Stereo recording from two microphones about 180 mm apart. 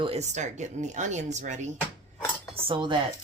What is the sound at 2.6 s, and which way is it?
Speech, 25° right (ahead or behind).